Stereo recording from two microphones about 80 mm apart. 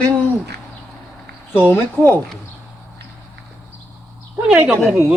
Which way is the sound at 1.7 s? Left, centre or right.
Left.